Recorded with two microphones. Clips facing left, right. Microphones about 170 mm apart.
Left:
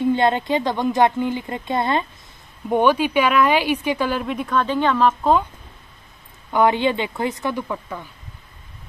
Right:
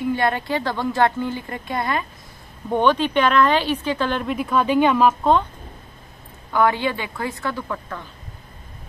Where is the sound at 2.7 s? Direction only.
10° left (ahead or behind); by 5.1 s 10° right (ahead or behind).